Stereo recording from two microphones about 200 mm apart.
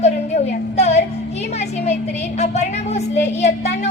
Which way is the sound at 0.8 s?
35° left (ahead or behind).